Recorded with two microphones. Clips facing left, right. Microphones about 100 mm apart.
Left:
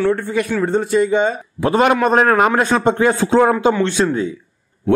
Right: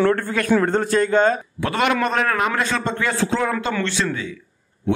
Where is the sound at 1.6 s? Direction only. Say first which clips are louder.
Left 7 dB; 35° left (ahead or behind).